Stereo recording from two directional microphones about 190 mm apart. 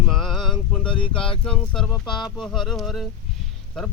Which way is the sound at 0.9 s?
25° left (ahead or behind).